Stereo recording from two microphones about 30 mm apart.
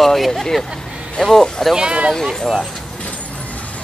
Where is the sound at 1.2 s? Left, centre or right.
Left.